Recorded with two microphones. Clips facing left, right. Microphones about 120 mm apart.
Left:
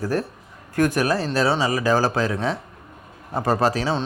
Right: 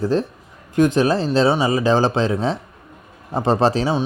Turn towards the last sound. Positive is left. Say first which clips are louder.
# right 3 dB
turn(degrees=-25)  # may be behind; listen again after turning